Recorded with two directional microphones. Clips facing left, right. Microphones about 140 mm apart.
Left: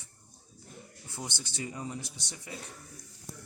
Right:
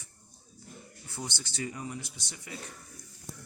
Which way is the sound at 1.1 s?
20° left (ahead or behind).